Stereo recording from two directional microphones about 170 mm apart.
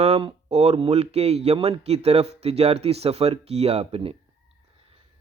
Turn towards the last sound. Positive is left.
turn(degrees=-35)  # may be behind; listen again after turning